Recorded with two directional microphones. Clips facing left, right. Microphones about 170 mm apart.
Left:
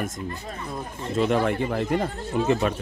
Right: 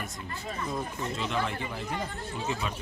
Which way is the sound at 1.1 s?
55° left (ahead or behind).